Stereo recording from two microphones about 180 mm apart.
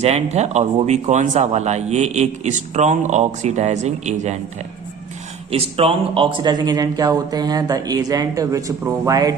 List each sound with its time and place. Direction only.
0.0 s speech: 40° right (ahead or behind)
5.5 s speech: 35° right (ahead or behind)